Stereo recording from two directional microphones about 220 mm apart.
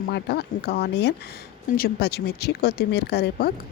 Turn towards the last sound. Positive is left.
turn(degrees=50)  # may be behind; listen again after turning